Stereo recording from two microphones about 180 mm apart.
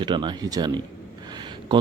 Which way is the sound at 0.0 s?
25° right (ahead or behind).